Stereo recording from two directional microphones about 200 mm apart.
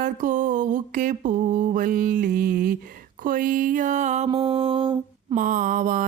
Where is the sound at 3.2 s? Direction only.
45° right (ahead or behind).